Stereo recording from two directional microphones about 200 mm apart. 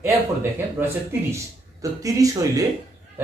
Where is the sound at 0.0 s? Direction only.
10° right (ahead or behind).